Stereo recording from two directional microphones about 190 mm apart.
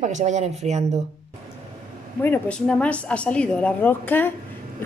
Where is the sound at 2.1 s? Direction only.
10° left (ahead or behind).